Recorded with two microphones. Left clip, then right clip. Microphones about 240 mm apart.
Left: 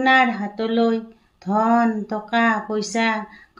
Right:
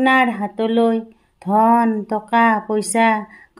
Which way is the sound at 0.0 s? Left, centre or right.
Right.